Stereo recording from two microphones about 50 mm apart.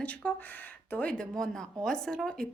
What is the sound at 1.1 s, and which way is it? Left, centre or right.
A woman's voice, centre.